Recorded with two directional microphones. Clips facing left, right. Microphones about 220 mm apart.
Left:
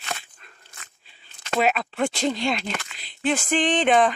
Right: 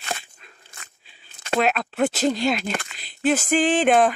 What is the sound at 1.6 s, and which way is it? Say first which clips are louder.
Speech: right 1 dB; centre (ahead or behind).